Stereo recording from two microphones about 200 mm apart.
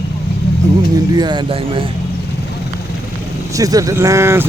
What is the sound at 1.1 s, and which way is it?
Speech, 20° right (ahead or behind).